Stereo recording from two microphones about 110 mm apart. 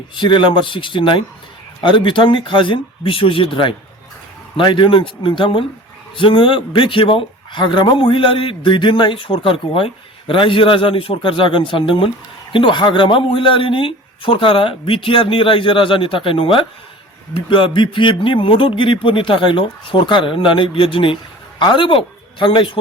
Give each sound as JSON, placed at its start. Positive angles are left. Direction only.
{"t": 0.2, "sound": "speech", "side_deg": 50}